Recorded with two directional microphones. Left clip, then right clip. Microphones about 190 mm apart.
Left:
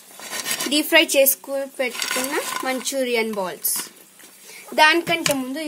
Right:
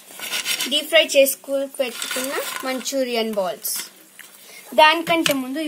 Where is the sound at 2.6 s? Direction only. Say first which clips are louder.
Even; 60° left (ahead or behind).